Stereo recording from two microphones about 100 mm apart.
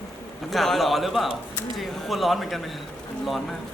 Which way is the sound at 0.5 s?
Centre (ahead or behind).